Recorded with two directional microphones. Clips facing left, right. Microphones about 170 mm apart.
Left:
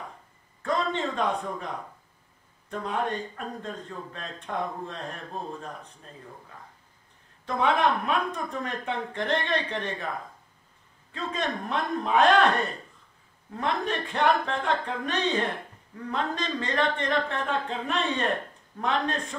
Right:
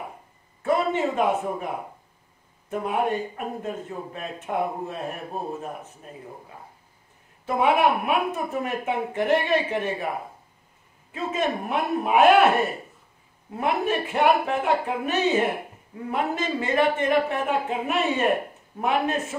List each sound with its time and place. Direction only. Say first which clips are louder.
0.0 s a sound: right 4 dB; 15° right (ahead or behind)
2.7 s a woman's voice: right 5 dB; 15° right (ahead or behind)
6.3 s speech: right 4 dB; 25° right (ahead or behind)
7.4 s a woman's voice: right 4 dB; 10° right (ahead or behind)